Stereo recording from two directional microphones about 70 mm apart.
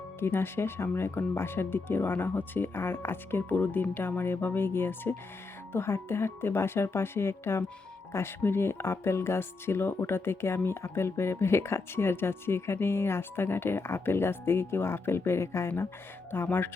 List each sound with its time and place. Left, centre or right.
0.2 s speech: left